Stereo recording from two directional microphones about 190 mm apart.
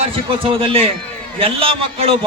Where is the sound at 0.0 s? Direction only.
30° right (ahead or behind).